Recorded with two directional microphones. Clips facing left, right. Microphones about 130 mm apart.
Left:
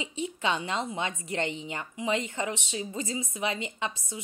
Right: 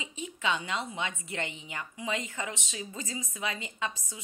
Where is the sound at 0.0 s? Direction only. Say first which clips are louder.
Left 3 dB; 30° left (ahead or behind).